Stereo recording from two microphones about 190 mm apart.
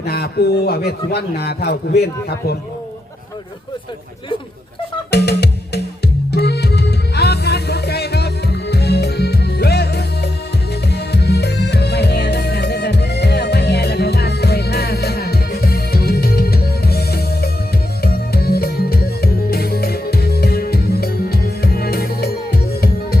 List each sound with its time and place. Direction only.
0.0 s a man's voice: 60° left (ahead or behind)
5.1 s music: 60° left (ahead or behind)